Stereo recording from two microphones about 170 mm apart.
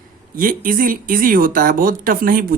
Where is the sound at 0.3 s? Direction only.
55° right (ahead or behind).